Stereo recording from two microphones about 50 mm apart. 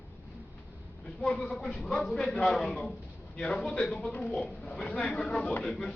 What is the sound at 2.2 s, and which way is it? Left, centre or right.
Speech, left.